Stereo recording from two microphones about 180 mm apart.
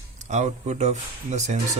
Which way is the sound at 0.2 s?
40° right (ahead or behind).